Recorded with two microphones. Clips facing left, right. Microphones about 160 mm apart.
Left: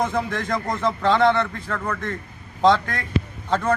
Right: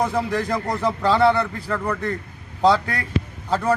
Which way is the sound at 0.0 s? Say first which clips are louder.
Right 2 dB; 10° right (ahead or behind).